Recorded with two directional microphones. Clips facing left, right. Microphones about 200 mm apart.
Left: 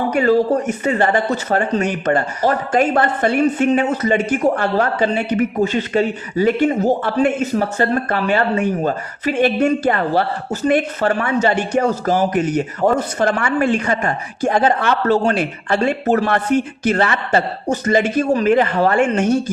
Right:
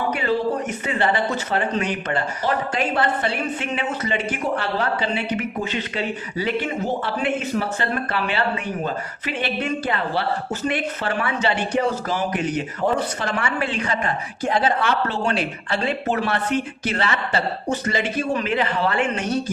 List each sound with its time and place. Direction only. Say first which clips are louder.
0.1 s speech: left 11 dB; 45° left (ahead or behind)